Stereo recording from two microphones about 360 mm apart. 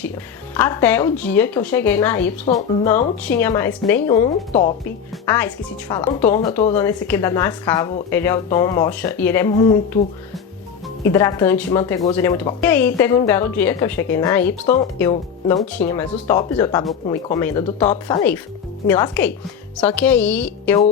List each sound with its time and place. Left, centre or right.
0.5 s speech: centre
11.0 s speech: centre